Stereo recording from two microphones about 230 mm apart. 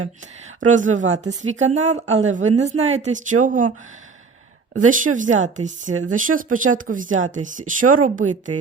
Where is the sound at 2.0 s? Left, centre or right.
Right.